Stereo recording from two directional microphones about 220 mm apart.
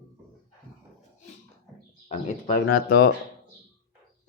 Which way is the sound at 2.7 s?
40° left (ahead or behind).